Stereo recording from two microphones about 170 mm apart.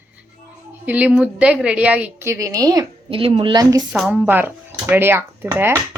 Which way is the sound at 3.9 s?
5° right (ahead or behind).